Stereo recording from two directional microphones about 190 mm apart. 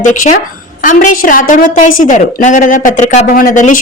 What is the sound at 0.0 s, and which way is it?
A woman's voice, 40° left (ahead or behind).